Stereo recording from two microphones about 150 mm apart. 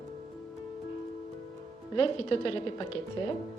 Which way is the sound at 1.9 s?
35° left (ahead or behind).